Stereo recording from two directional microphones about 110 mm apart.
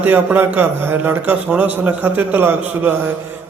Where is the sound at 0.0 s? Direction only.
15° right (ahead or behind).